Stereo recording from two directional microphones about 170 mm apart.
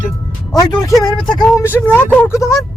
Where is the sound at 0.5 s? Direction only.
20° left (ahead or behind).